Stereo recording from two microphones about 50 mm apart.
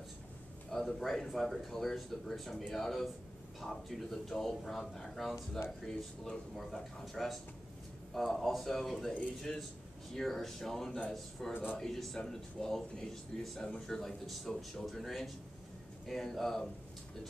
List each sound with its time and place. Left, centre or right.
0.7 s a man's voice: centre